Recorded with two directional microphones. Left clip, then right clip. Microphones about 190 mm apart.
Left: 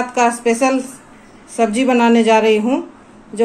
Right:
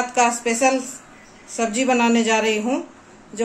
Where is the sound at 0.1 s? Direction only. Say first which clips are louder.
Left 5 dB; 15° left (ahead or behind).